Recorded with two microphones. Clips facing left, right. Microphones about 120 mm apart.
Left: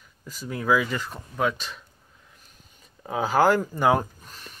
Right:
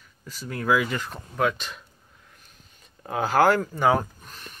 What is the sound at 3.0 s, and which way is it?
Speech, 5° left (ahead or behind).